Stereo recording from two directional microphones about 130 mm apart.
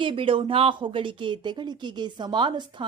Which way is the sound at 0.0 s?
40° right (ahead or behind).